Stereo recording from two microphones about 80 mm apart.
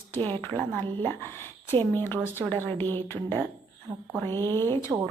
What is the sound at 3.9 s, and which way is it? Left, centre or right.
Speech, right.